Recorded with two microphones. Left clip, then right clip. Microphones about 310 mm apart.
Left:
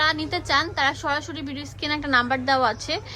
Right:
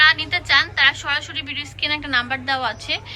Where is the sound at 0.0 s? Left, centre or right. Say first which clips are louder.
Right 7 dB; centre.